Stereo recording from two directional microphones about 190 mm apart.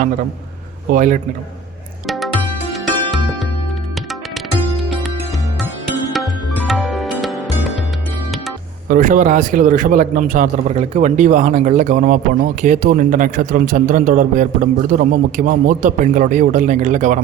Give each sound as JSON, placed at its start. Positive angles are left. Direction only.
{"t": 0.9, "sound": "a man's voice", "side_deg": -45}
{"t": 2.0, "sound": "music", "side_deg": 0}
{"t": 6.1, "sound": "music", "side_deg": 0}
{"t": 8.9, "sound": "a man's voice", "side_deg": -45}